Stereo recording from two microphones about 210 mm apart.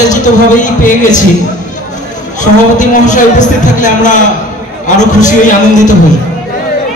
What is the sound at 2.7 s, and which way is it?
A man's voice, 35° left (ahead or behind).